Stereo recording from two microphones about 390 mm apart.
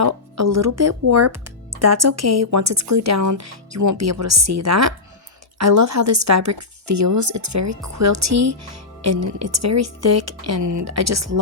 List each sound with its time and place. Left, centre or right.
0.0 s speech: right